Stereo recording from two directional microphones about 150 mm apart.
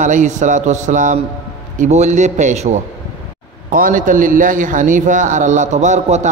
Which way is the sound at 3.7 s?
65° right (ahead or behind).